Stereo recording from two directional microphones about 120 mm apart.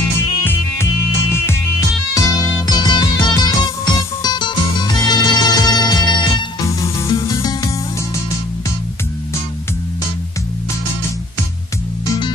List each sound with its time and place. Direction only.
0.4 s music: 15° left (ahead or behind)
2.1 s music: 30° left (ahead or behind)